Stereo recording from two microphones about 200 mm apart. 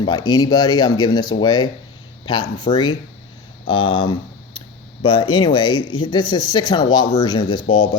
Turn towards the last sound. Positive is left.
turn(degrees=25)  # may be behind; listen again after turning